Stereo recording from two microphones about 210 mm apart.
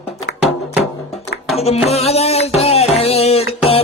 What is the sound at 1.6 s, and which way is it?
Music, 30° left (ahead or behind).